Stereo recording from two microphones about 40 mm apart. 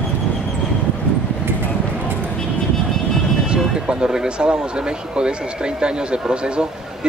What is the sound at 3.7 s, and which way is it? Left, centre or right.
Speech, centre.